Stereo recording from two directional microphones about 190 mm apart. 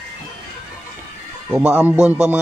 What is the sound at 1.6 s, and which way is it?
Speech, 5° right (ahead or behind).